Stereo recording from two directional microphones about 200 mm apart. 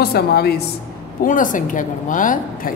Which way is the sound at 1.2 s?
40° left (ahead or behind).